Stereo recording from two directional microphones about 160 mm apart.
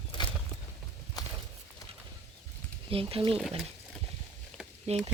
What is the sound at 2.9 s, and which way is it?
Speech, 35° right (ahead or behind).